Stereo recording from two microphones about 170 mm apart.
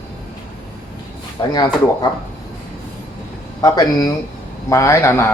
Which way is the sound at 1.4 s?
25° left (ahead or behind).